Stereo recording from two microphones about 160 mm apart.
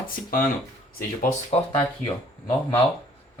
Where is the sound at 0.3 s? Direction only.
60° left (ahead or behind).